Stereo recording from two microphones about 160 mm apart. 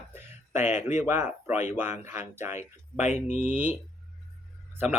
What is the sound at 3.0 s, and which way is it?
Speech, 45° left (ahead or behind).